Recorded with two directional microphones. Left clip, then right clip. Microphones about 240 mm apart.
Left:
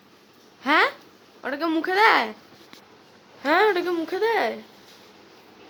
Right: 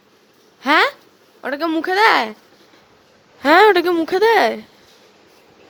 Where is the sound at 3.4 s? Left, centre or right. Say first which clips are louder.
Right 9 dB; right.